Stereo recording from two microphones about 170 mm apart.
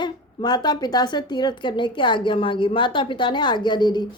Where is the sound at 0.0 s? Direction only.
25° left (ahead or behind).